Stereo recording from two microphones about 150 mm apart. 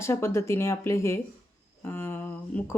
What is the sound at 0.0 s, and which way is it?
Speech, 20° left (ahead or behind).